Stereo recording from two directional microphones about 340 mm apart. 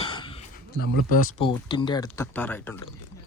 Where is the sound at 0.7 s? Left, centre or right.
Left; by 2.8 s centre.